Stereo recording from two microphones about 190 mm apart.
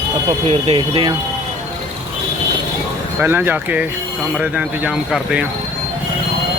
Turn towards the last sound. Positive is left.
turn(degrees=-5)  # may be behind; listen again after turning